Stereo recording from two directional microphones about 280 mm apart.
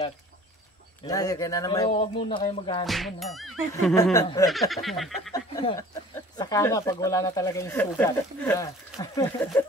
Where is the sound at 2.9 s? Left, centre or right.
Centre.